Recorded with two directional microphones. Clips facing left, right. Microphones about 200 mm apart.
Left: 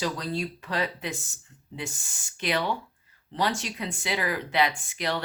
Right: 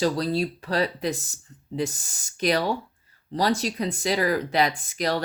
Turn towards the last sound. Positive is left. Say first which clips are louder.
# right 4 dB
turn(degrees=-40)  # may be behind; listen again after turning